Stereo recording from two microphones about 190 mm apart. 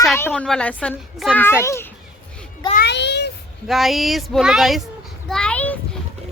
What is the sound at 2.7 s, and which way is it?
Child singing, 60° left (ahead or behind).